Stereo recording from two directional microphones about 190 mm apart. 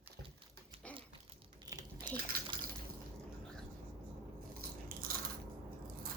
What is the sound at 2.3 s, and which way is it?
Liquid, 50° right (ahead or behind).